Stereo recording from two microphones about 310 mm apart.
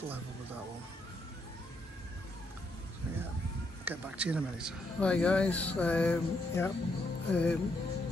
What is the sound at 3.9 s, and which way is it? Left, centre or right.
Speech, centre.